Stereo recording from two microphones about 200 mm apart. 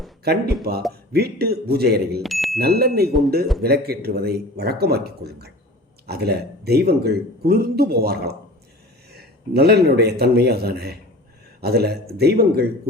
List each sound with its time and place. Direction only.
0.3 s speech: 50° right (ahead or behind)
2.2 s bicycle bell: centre (ahead or behind)
2.6 s speech: 50° right (ahead or behind)